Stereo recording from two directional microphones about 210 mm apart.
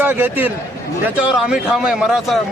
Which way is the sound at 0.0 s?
10° right (ahead or behind).